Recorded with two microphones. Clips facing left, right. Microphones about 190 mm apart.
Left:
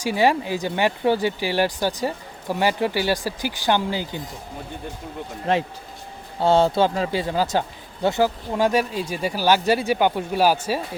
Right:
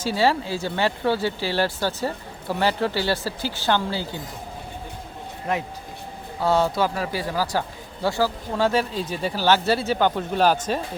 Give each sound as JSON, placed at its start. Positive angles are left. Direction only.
{"t": 0.0, "sound": "speech", "side_deg": 15}
{"t": 6.4, "sound": "speech", "side_deg": 25}